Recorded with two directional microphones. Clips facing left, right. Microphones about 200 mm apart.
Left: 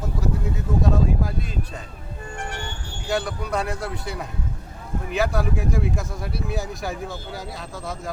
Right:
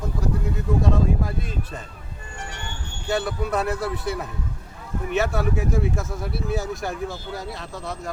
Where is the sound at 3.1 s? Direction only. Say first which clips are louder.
Right 1 dB; centre (ahead or behind).